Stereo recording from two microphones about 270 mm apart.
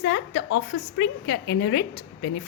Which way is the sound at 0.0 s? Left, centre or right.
Left.